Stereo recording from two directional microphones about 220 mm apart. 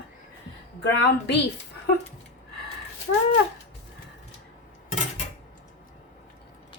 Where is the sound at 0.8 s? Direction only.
50° left (ahead or behind).